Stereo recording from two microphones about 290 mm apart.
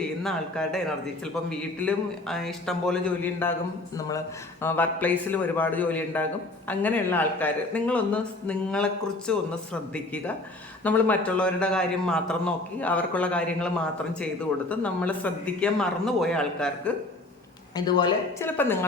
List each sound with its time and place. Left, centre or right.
0.2 s speech: centre
4.6 s speech: centre
14.7 s speech: centre
17.7 s speech: centre